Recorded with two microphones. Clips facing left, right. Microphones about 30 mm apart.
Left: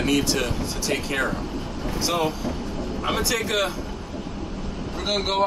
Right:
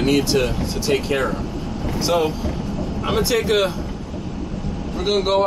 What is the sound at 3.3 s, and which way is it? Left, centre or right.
Speech, centre.